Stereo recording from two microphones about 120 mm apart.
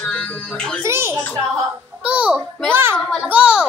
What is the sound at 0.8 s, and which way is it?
Speech, 20° right (ahead or behind).